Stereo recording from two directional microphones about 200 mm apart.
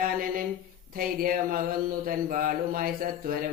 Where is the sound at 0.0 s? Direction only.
45° right (ahead or behind).